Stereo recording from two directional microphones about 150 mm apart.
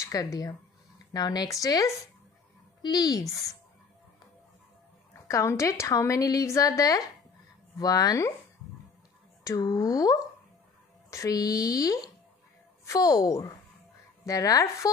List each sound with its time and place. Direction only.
0.0 s a woman's voice: 25° left (ahead or behind)
5.3 s a woman's voice: 20° left (ahead or behind)
9.4 s a woman's voice: 20° left (ahead or behind)